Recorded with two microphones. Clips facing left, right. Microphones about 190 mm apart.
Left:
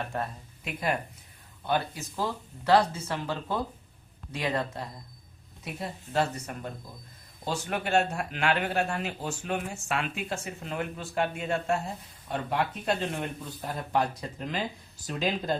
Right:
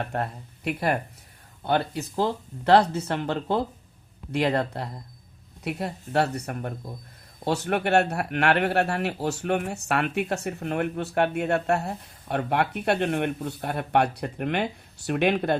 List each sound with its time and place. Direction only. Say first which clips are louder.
0.1 s speech: right 4 dB; 65° right (ahead or behind)